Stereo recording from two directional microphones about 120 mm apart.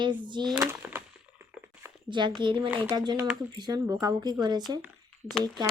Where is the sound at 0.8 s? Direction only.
15° right (ahead or behind).